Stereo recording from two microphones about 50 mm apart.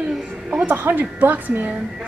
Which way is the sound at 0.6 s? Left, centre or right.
Right.